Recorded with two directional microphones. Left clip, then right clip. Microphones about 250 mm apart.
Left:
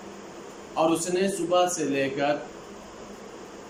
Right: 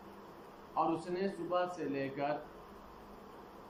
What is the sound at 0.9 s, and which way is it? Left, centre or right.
A man's voice, left.